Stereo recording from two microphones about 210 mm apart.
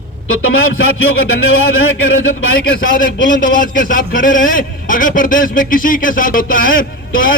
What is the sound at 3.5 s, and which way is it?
A man's voice, 40° left (ahead or behind).